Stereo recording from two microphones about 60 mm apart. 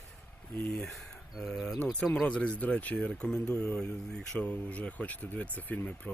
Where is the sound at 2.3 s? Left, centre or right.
Centre.